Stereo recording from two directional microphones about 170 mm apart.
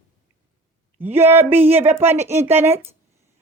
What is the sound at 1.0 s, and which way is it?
Speech, 10° right (ahead or behind).